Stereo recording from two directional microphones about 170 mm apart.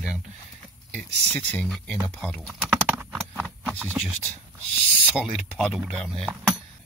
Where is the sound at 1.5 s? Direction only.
5° left (ahead or behind).